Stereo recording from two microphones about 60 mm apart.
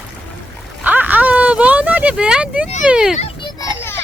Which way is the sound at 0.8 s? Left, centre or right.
Right.